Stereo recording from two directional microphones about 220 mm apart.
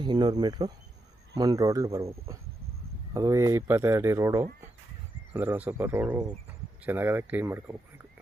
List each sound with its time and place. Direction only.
0.0 s speech: 20° right (ahead or behind)
3.2 s speech: 15° right (ahead or behind)